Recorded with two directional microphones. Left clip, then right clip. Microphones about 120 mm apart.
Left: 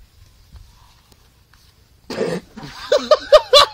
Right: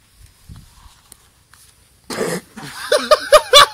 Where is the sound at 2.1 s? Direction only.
20° right (ahead or behind).